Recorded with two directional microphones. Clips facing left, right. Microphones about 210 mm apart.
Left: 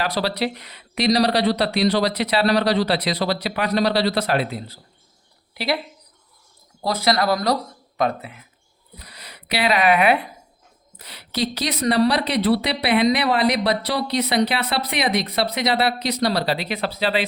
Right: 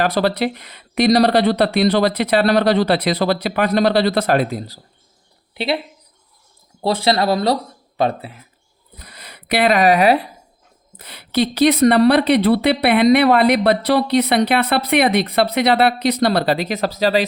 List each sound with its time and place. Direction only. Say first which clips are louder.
0.0 s speech: right 5 dB; 50° right (ahead or behind)
5.5 s speech: right 3 dB; 25° right (ahead or behind)
6.8 s speech: right 3 dB; 30° right (ahead or behind)
9.0 s speech: right 2 dB; 50° right (ahead or behind); by 10.2 s 35° right (ahead or behind)
10.9 s speech: right 9 dB; 55° right (ahead or behind)